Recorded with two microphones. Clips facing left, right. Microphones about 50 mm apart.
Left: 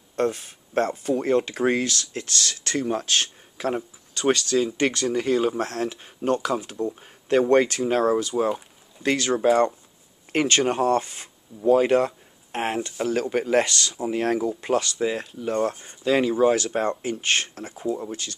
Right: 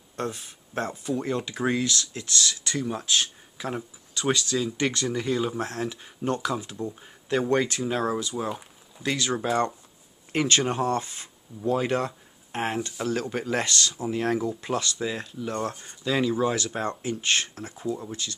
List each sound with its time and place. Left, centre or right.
0.1 s speech: left
4.7 s speech: left